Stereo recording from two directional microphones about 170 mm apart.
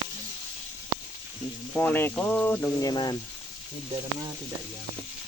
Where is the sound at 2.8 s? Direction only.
25° left (ahead or behind).